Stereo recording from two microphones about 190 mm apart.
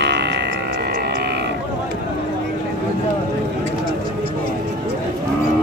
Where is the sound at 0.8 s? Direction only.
50° right (ahead or behind).